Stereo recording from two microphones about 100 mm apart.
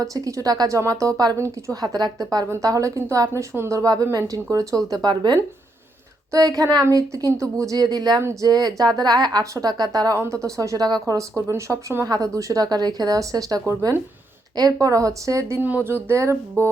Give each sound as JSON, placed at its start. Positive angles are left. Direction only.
{"t": 0.0, "sound": "speech", "side_deg": -35}
{"t": 5.0, "sound": "speech", "side_deg": -45}
{"t": 10.2, "sound": "speech", "side_deg": -30}
{"t": 15.6, "sound": "speech", "side_deg": -20}